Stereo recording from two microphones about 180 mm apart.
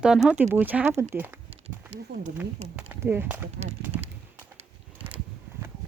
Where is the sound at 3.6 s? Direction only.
60° right (ahead or behind).